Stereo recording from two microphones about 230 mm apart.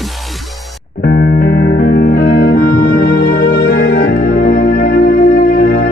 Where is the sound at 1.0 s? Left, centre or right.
Left.